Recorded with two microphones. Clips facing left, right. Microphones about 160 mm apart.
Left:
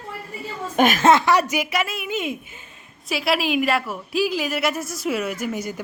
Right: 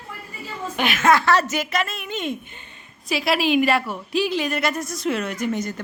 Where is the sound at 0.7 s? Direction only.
45° left (ahead or behind).